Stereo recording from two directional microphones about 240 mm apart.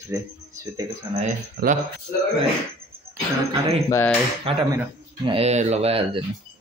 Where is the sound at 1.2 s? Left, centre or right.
Right.